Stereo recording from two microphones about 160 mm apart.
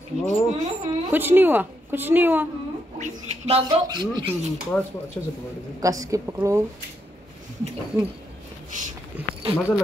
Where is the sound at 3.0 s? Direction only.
40° right (ahead or behind).